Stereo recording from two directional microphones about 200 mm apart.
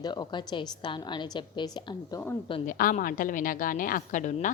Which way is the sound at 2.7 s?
45° left (ahead or behind).